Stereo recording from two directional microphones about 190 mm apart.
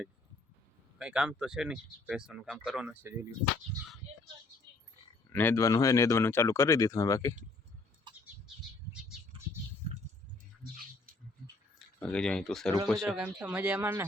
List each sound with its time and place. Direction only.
0.9 s speech: 5° right (ahead or behind)
5.3 s speech: 10° left (ahead or behind)
9.8 s a sound: 35° right (ahead or behind)
11.9 s speech: 5° left (ahead or behind); by 14.0 s 10° right (ahead or behind)